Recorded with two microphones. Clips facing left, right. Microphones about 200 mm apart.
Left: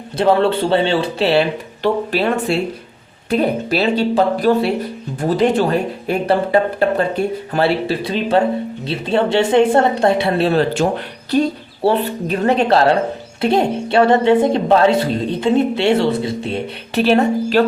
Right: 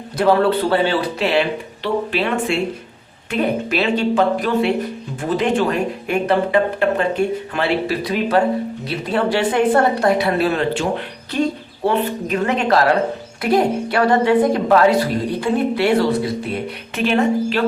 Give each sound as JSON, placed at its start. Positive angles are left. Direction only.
{"t": 0.2, "sound": "a woman's voice", "side_deg": 25}
{"t": 1.8, "sound": "a woman's voice", "side_deg": 40}